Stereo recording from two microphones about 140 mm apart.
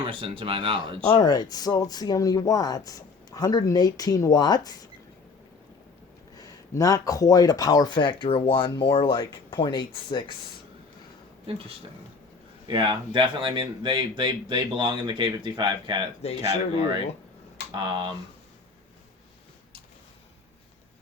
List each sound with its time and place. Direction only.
0.1 s speech: 40° right (ahead or behind)
1.1 s speech: 30° left (ahead or behind)
6.4 s speech: 25° left (ahead or behind)
11.5 s speech: 40° right (ahead or behind)
12.6 s speech: 35° right (ahead or behind)
16.2 s speech: 50° left (ahead or behind)
17.7 s speech: 35° right (ahead or behind)